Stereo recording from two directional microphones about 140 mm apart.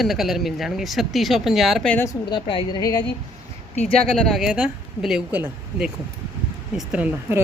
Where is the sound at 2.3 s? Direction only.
35° left (ahead or behind).